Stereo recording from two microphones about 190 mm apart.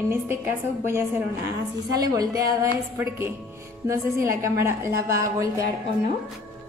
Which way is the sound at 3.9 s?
15° right (ahead or behind).